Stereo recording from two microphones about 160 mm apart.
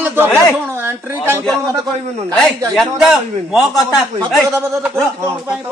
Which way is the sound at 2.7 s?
Centre (ahead or behind).